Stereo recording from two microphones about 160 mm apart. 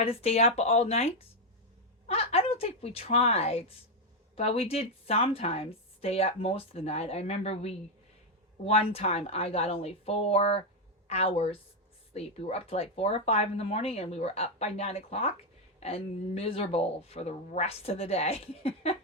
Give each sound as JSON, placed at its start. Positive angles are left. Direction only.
{"t": 0.0, "sound": "speech", "side_deg": 40}